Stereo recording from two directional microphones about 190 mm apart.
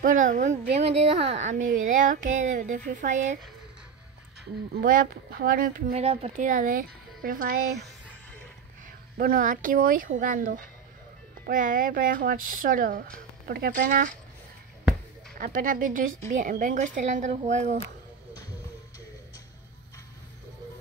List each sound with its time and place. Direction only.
0.0 s a woman's voice: 45° right (ahead or behind)
4.8 s speech: 50° right (ahead or behind)
5.9 s a woman's voice: 35° right (ahead or behind)
6.3 s speech: 45° right (ahead or behind)
9.2 s speech: 50° right (ahead or behind)
15.3 s a woman's voice: 45° right (ahead or behind)